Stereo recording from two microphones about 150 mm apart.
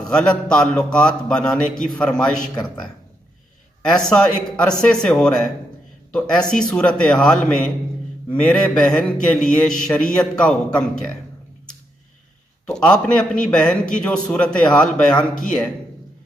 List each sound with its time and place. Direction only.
0.1 s a man's voice: 5° left (ahead or behind)
3.9 s a man's voice: 5° left (ahead or behind)
12.6 s a man's voice: 5° left (ahead or behind)